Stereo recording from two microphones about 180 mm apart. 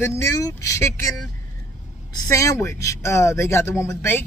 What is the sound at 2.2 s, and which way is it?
Speech, 15° left (ahead or behind).